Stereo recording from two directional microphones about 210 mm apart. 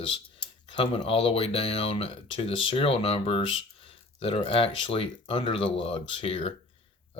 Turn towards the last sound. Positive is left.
turn(degrees=30)  # may be behind; listen again after turning